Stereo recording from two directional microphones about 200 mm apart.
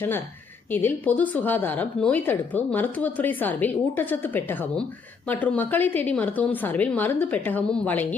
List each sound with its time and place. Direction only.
0.7 s a woman's voice: 10° left (ahead or behind)